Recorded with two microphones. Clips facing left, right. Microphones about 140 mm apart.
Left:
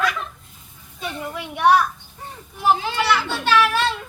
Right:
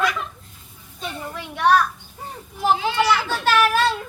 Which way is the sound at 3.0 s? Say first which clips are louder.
Right 1 dB; 40° right (ahead or behind).